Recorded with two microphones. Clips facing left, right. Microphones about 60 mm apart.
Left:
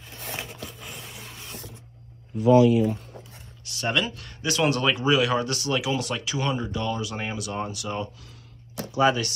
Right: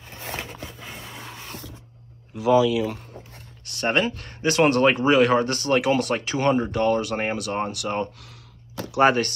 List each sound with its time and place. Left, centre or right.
0.1 s a sound: right
2.3 s speech: right
3.3 s speech: right